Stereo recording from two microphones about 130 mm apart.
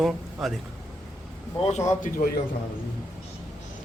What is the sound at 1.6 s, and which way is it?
Speech, 55° left (ahead or behind).